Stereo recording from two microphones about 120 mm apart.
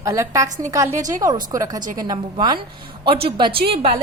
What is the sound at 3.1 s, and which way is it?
Speech, 45° right (ahead or behind).